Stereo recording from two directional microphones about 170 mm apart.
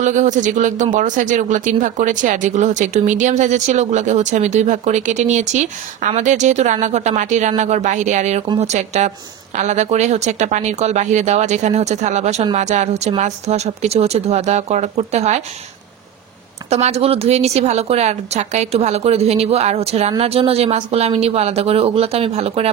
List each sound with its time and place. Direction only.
0.0 s speech: 45° right (ahead or behind)
16.6 s speech: 40° right (ahead or behind)